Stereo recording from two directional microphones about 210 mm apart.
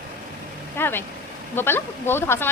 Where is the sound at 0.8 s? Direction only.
10° left (ahead or behind).